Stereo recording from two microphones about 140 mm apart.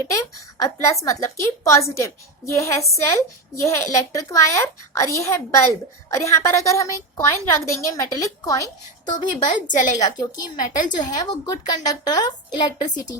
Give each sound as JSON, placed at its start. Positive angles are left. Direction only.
{"t": 0.0, "sound": "a woman's voice", "side_deg": 25}